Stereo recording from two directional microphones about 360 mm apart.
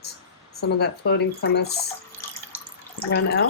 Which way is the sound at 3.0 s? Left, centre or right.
Left.